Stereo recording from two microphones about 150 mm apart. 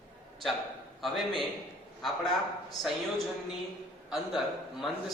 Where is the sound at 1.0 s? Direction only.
Centre (ahead or behind).